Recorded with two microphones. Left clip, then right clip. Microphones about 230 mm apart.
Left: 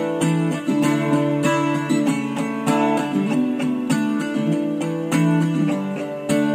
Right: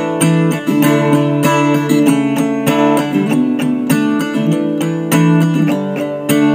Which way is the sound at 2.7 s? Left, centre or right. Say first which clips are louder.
Right 6 dB; right.